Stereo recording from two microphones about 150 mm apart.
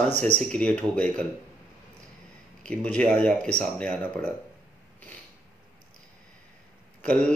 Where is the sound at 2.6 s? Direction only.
5° left (ahead or behind).